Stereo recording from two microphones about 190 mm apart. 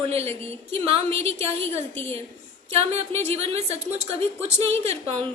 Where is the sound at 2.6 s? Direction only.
30° right (ahead or behind).